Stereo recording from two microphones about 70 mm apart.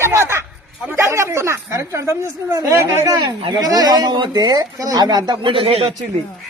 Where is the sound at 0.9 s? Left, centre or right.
Right.